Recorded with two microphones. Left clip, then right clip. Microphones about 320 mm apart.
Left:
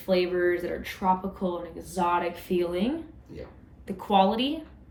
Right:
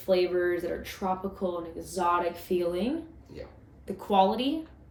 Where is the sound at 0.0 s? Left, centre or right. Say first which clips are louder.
Left 1 dB; left.